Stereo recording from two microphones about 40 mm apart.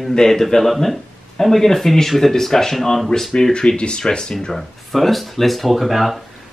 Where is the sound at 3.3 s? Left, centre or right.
Left.